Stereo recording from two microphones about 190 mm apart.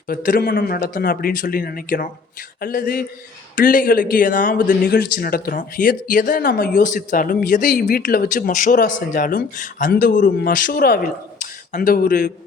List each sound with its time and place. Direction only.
0.1 s speech: 45° left (ahead or behind)